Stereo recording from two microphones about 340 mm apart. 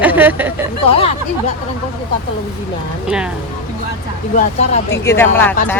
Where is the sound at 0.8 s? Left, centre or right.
Centre.